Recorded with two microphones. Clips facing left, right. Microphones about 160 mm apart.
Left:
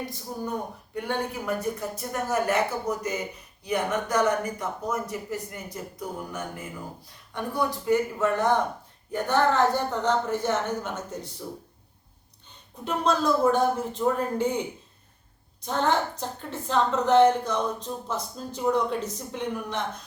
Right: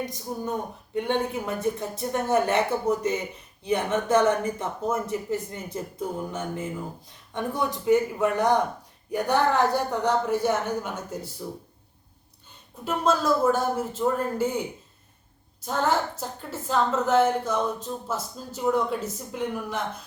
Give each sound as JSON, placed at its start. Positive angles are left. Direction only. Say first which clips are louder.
{"t": 0.0, "sound": "speech", "louder": "right 2 dB", "side_deg": -20}
{"t": 12.8, "sound": "a woman's voice", "louder": "right 1 dB", "side_deg": -5}
{"t": 15.6, "sound": "a woman's voice", "louder": "even", "side_deg": -5}